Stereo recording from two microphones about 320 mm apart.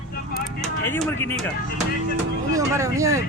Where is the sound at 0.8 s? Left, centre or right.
Centre.